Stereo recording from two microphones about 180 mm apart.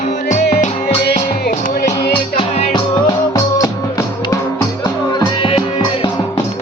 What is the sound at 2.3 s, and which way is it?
Music, 30° left (ahead or behind).